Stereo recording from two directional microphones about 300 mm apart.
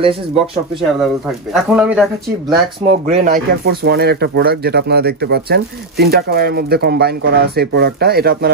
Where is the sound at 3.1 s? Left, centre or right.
Right.